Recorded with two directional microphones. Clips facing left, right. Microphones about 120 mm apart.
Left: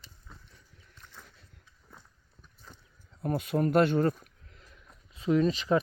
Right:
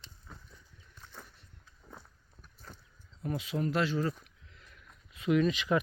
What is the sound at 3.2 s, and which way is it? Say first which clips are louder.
Speech: left 5 dB; 50° left (ahead or behind).